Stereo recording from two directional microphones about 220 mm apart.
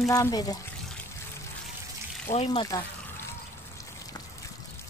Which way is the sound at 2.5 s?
20° left (ahead or behind).